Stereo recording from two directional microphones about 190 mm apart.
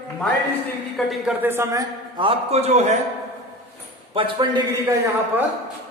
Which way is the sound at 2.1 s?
30° right (ahead or behind).